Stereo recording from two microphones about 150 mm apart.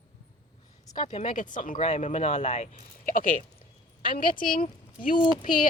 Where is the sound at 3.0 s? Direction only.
65° left (ahead or behind).